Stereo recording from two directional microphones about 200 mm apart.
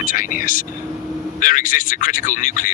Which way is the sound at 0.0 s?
45° left (ahead or behind).